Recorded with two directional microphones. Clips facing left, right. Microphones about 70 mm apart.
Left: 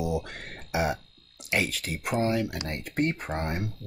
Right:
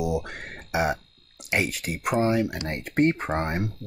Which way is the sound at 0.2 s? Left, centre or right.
Centre.